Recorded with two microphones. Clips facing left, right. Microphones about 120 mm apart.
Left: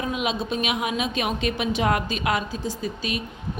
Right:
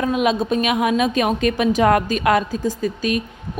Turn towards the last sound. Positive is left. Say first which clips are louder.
# right 7 dB
turn(degrees=-45)  # may be behind; listen again after turning